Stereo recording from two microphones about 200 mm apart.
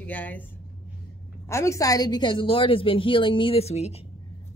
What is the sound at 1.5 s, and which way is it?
A woman's voice, 15° left (ahead or behind).